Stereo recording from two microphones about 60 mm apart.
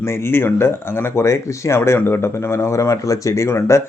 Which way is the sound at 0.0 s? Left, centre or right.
Left.